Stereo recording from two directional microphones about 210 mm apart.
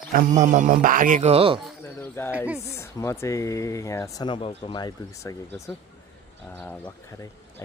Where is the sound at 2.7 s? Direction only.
15° left (ahead or behind).